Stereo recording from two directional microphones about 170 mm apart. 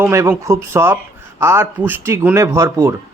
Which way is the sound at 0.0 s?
15° right (ahead or behind).